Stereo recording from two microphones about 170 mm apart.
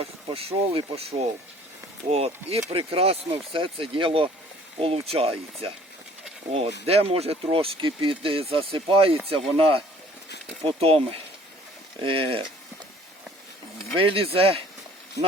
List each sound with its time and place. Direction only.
0.0 s speech: 35° right (ahead or behind)
6.8 s speech: 35° right (ahead or behind)
13.9 s speech: 35° right (ahead or behind)